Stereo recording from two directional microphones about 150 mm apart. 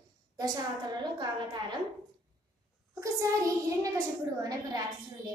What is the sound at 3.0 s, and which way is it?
A woman's voice, 20° right (ahead or behind).